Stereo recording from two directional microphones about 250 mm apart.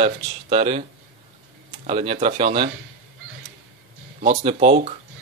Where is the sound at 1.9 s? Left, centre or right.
Right.